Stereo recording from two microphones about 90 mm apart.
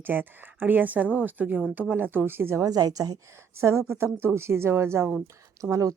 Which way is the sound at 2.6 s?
45° right (ahead or behind).